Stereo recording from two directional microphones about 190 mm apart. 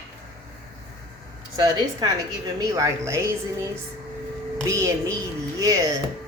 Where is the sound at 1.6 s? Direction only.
20° right (ahead or behind).